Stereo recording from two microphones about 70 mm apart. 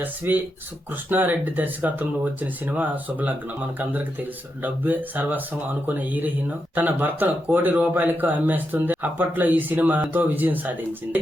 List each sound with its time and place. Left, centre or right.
0.0 s speech: right
4.6 s speech: right